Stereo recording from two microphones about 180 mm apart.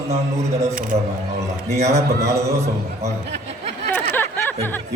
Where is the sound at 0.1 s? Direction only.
35° right (ahead or behind).